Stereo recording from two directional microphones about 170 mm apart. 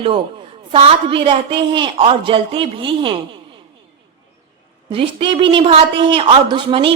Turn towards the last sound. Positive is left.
turn(degrees=-30)  # may be behind; listen again after turning